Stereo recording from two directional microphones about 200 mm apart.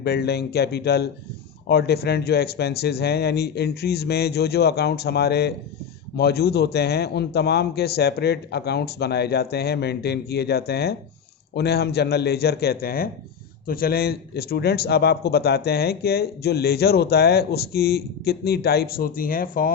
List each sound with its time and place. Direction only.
0.0 s a man's voice: 55° left (ahead or behind)